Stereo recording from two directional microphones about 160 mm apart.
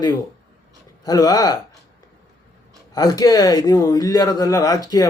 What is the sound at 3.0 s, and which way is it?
A man's voice, 25° left (ahead or behind).